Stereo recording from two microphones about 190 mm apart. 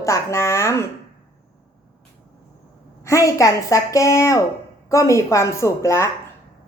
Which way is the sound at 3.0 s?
15° left (ahead or behind).